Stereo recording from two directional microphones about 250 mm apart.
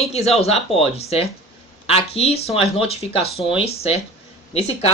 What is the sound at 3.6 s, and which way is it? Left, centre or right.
Speech, left.